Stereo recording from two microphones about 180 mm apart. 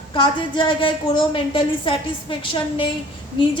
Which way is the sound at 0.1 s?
25° left (ahead or behind).